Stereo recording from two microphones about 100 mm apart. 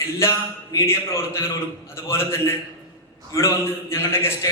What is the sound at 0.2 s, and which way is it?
A man's voice, 30° left (ahead or behind).